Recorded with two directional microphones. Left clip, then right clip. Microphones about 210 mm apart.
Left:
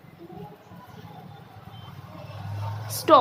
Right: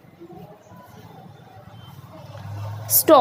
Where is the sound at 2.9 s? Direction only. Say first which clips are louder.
Right 4 dB; 25° right (ahead or behind).